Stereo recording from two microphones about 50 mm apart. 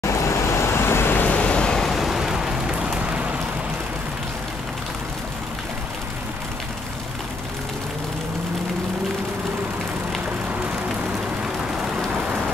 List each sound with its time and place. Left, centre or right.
0.0 s vehicle: left
1.2 s vehicle: left
1.8 s vehicle: centre; by 3.3 s right
11.4 s vehicle: centre